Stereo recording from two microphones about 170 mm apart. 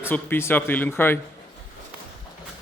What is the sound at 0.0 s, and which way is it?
Speech, 15° left (ahead or behind).